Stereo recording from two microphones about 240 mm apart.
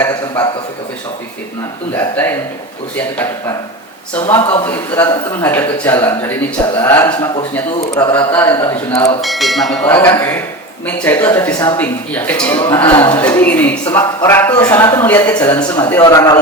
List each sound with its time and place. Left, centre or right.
0.0 s a man's voice: centre
2.0 s speech: centre
4.6 s speech: centre